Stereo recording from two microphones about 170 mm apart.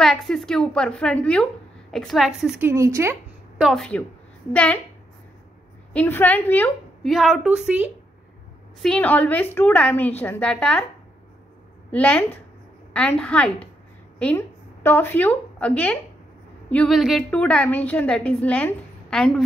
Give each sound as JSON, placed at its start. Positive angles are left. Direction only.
{"t": 0.0, "sound": "a woman's voice", "side_deg": 0}
{"t": 2.7, "sound": "a woman's voice", "side_deg": -15}
{"t": 3.5, "sound": "a woman's voice", "side_deg": 0}
{"t": 5.9, "sound": "a woman's voice", "side_deg": 10}
{"t": 7.1, "sound": "a woman's voice", "side_deg": 0}
{"t": 8.8, "sound": "a woman's voice", "side_deg": 5}
{"t": 11.9, "sound": "a woman's voice", "side_deg": 5}